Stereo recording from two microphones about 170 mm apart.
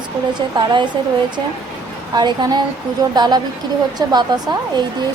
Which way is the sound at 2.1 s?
25° right (ahead or behind).